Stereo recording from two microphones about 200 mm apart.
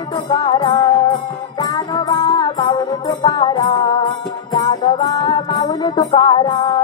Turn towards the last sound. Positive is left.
turn(degrees=25)  # may be behind; listen again after turning